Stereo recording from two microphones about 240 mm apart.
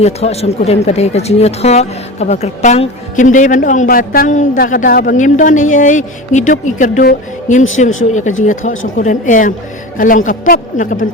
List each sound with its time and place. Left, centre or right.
0.0 s speech: left
9.0 s speech: left